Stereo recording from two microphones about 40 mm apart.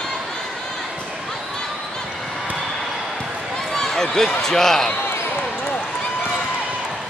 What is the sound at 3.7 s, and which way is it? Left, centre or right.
Speech, centre.